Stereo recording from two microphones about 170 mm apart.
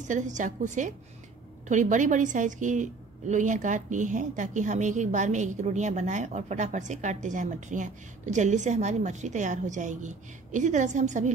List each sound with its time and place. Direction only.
0.0 s a woman's voice: 45° right (ahead or behind)